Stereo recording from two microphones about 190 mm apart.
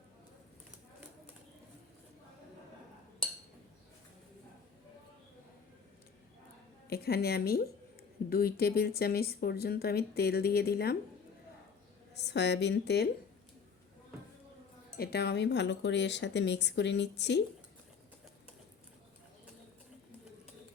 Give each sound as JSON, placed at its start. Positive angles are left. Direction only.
{"t": 6.8, "sound": "speech", "side_deg": 55}
{"t": 12.1, "sound": "speech", "side_deg": 65}
{"t": 14.9, "sound": "speech", "side_deg": 55}